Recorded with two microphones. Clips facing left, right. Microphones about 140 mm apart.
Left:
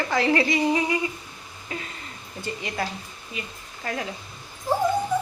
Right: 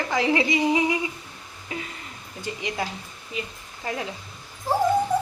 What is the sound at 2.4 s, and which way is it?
A woman's voice, 15° right (ahead or behind).